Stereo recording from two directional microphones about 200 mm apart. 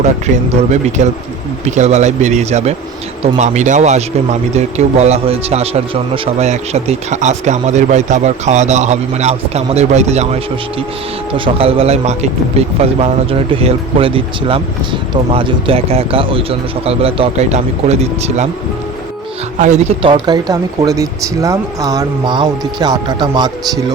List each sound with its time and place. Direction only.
0.5 s speech: 35° right (ahead or behind)
19.5 s speech: 35° right (ahead or behind); by 23.8 s 20° right (ahead or behind)